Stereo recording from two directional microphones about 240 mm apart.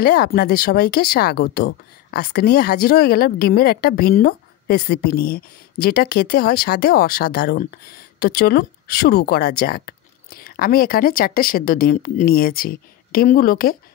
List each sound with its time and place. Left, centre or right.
0.0 s speech: left